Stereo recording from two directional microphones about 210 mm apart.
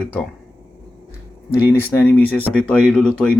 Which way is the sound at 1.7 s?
10° left (ahead or behind).